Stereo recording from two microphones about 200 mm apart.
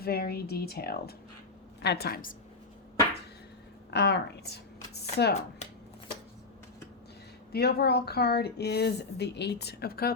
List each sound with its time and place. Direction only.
0.0 s a woman's voice: 50° left (ahead or behind)
3.9 s speech: 55° left (ahead or behind)
7.5 s speech: 50° left (ahead or behind)